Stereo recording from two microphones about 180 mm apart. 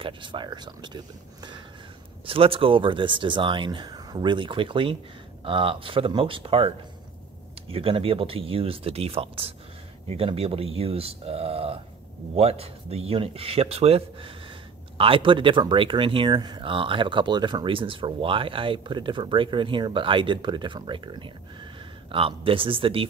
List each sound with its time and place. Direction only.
0.0 s speech: 25° right (ahead or behind)
7.7 s speech: 30° right (ahead or behind)